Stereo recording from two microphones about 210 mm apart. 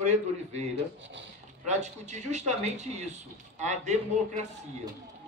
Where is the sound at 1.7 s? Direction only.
35° right (ahead or behind).